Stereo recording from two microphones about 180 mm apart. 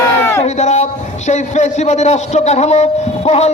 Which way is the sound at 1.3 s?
40° left (ahead or behind).